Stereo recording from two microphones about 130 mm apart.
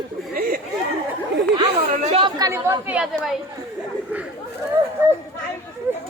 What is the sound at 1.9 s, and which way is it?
Speech, 60° right (ahead or behind).